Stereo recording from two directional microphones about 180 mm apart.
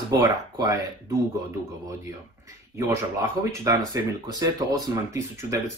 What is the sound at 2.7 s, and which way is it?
Speech, 15° right (ahead or behind).